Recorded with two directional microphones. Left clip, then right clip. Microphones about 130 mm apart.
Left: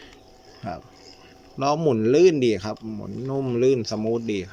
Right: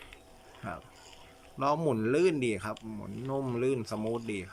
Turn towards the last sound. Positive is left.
turn(degrees=25)  # may be behind; listen again after turning